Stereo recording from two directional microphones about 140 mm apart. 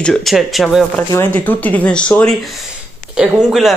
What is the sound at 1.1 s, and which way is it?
Speech, 15° left (ahead or behind).